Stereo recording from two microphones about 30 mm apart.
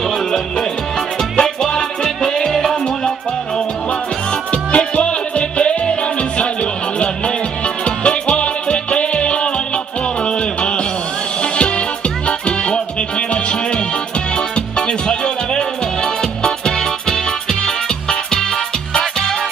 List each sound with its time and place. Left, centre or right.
1.3 s music: left
2.4 s music: centre
4.5 s music: left
7.8 s music: left
12.3 s music: left
14.3 s music: left